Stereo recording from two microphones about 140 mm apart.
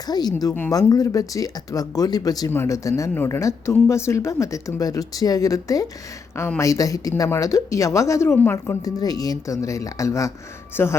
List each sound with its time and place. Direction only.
0.1 s speech: 30° left (ahead or behind)